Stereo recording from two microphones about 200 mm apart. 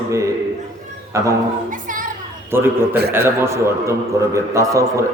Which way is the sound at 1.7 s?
40° right (ahead or behind).